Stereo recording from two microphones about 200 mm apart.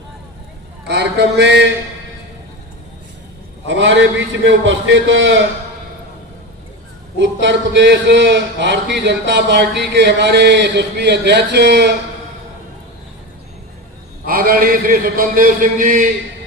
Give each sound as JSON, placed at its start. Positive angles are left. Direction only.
{"t": 0.9, "sound": "speech", "side_deg": -55}
{"t": 3.7, "sound": "a man's voice", "side_deg": -65}
{"t": 7.2, "sound": "speech", "side_deg": -65}
{"t": 14.3, "sound": "a man's voice", "side_deg": -45}